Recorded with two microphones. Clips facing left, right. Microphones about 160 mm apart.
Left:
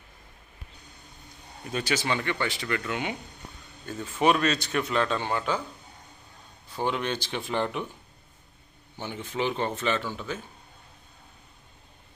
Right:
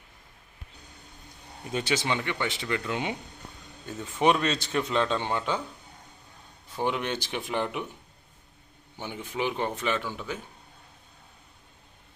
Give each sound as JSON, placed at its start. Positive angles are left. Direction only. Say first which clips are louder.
{"t": 1.7, "sound": "a man's voice", "louder": "even", "side_deg": -25}
{"t": 6.7, "sound": "speech", "louder": "even", "side_deg": -15}
{"t": 9.0, "sound": "speech", "louder": "left 1 dB", "side_deg": -10}